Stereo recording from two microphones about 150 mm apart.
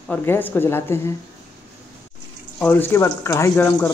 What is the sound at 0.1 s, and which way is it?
Speech, 15° left (ahead or behind).